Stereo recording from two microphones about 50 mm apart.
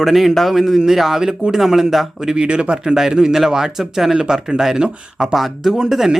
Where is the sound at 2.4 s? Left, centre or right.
Right.